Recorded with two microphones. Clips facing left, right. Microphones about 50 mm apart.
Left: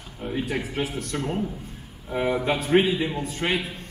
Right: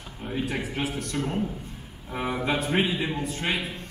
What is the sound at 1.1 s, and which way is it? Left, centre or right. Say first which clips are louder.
Speech: left 1 dB; centre.